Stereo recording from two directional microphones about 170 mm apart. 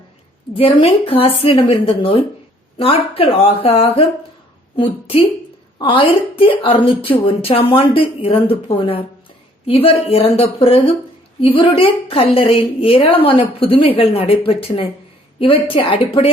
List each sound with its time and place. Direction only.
0.5 s a woman's voice: 35° left (ahead or behind)